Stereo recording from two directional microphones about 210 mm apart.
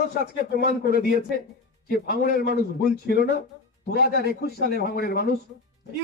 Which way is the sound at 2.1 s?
45° left (ahead or behind).